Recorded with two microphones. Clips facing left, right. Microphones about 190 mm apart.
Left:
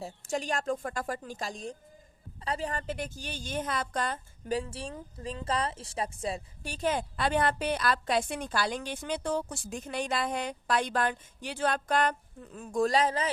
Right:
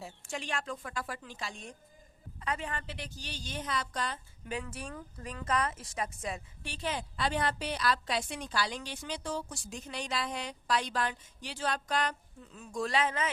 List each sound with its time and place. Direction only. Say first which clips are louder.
0.0 s speech: left 7 dB; 40° left (ahead or behind)
4.5 s speech: left 6 dB; 30° left (ahead or behind)